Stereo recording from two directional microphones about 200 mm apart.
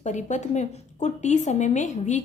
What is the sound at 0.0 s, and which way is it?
A woman's voice, 35° left (ahead or behind).